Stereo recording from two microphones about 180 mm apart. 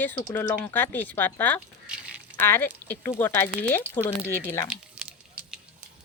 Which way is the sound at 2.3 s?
10° left (ahead or behind).